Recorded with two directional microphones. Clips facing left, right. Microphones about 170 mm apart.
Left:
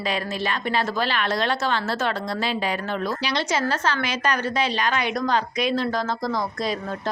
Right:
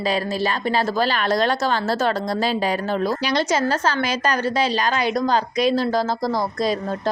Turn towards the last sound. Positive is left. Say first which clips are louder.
# right 4 dB
turn(degrees=-35)  # may be behind; listen again after turning